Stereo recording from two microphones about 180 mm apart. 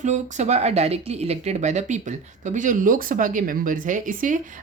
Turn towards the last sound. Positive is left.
turn(degrees=-45)  # may be behind; listen again after turning